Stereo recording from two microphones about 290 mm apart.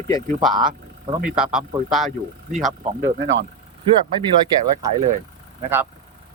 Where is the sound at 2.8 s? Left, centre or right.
Right.